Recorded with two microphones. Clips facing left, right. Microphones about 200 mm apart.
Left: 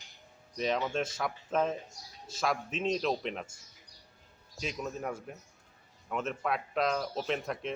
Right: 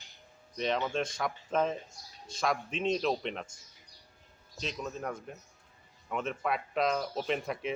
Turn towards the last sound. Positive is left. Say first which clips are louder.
# right 1 dB
turn(degrees=0)  # may be behind; listen again after turning